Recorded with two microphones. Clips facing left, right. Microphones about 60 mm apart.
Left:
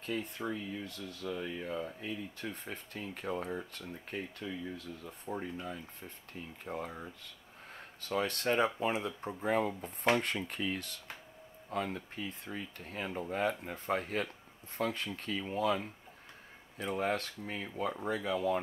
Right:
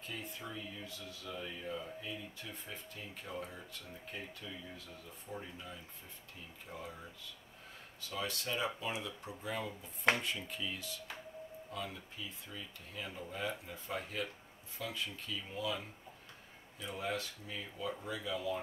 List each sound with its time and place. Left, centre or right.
0.0 s speech: left
8.0 s speech: left